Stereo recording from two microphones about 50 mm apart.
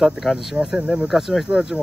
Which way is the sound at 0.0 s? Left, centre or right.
Centre.